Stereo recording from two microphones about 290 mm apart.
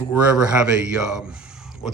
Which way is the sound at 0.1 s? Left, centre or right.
Centre.